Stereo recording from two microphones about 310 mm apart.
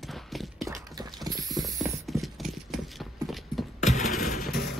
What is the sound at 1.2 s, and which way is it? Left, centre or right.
Mechanisms, centre.